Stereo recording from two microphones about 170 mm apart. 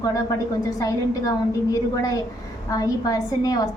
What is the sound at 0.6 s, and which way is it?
A woman's voice, 20° left (ahead or behind).